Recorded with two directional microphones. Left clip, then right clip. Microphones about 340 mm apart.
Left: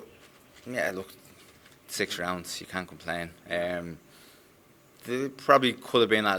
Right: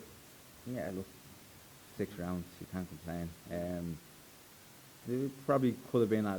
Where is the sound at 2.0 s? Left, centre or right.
Centre.